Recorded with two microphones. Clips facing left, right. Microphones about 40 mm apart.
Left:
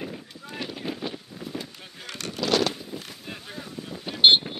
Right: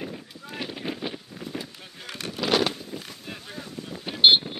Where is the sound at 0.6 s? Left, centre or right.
Centre.